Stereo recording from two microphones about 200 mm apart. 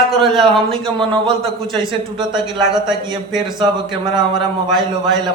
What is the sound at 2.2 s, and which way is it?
Speech, 20° right (ahead or behind).